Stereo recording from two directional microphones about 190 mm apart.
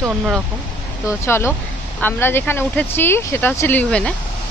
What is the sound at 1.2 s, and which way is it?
Speech, 15° left (ahead or behind).